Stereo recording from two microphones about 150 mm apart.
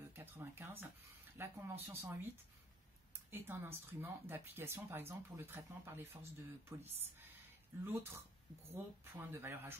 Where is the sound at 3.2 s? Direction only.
15° right (ahead or behind).